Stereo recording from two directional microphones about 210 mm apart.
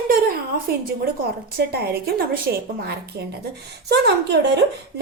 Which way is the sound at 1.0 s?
45° right (ahead or behind).